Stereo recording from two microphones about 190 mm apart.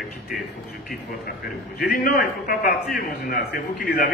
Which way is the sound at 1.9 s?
50° left (ahead or behind).